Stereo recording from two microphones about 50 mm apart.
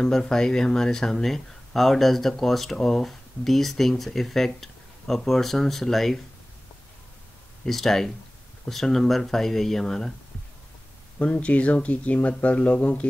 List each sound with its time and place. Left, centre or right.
0.0 s speech: centre
7.6 s speech: centre
11.1 s speech: left